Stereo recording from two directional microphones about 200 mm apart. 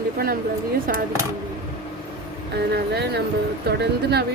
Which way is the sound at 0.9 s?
45° right (ahead or behind).